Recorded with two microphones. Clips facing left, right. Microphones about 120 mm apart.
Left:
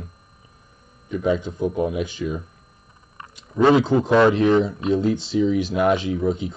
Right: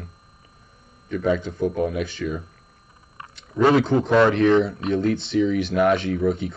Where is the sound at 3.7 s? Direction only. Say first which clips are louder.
Left 2 dB; 15° left (ahead or behind).